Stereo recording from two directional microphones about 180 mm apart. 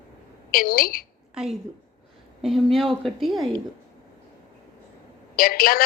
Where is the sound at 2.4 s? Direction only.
Centre (ahead or behind).